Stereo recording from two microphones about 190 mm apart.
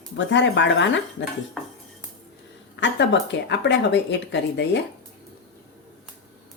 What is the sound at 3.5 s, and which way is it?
Speech, 65° left (ahead or behind).